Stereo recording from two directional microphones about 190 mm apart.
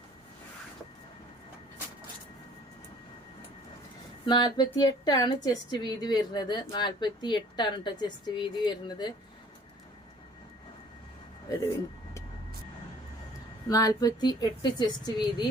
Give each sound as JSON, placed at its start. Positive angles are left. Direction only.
{"t": 4.3, "sound": "a woman's voice", "side_deg": 25}
{"t": 11.5, "sound": "a woman's voice", "side_deg": 20}
{"t": 13.7, "sound": "a woman's voice", "side_deg": 20}